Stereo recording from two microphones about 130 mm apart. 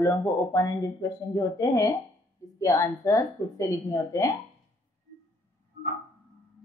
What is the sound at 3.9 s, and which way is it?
Speech, 25° left (ahead or behind).